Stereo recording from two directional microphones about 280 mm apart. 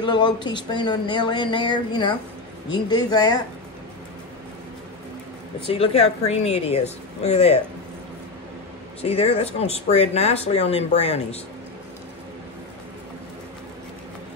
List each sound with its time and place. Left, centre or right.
0.0 s speech: centre
5.7 s speech: left
9.0 s speech: left